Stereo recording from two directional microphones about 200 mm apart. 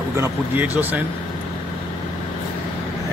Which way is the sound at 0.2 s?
10° right (ahead or behind).